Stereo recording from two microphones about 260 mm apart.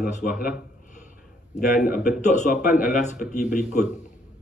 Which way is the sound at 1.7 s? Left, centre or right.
Left.